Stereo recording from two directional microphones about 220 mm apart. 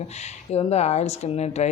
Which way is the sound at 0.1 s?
30° left (ahead or behind).